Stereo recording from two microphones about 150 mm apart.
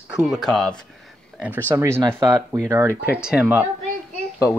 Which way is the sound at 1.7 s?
15° right (ahead or behind).